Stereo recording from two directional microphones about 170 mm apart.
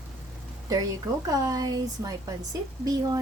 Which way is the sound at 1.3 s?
20° right (ahead or behind).